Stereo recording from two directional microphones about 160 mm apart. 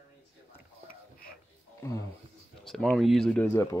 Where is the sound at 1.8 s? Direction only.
20° left (ahead or behind).